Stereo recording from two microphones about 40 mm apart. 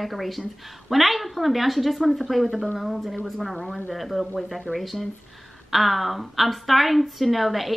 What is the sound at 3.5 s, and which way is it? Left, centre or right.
Speech, centre.